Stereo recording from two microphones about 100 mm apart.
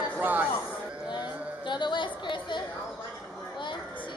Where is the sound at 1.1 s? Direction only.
50° left (ahead or behind).